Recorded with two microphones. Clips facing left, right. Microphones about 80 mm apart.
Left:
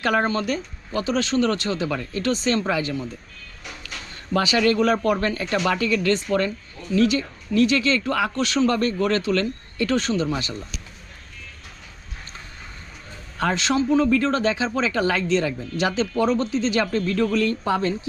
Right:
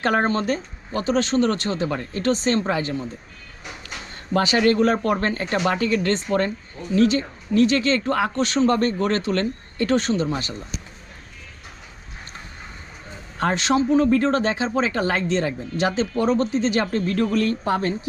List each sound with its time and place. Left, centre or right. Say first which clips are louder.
0.0 s speech: right 1 dB; right
13.4 s speech: right 1 dB; right